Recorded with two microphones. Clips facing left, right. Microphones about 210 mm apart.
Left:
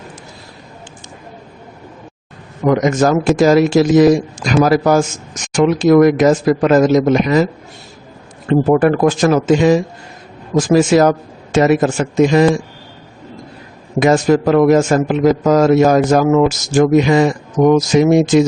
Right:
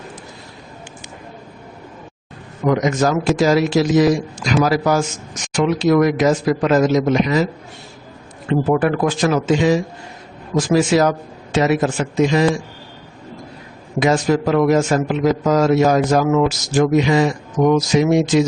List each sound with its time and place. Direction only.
2.6 s a man's voice: 50° left (ahead or behind)
8.6 s a man's voice: 45° left (ahead or behind)
14.0 s a man's voice: 50° left (ahead or behind)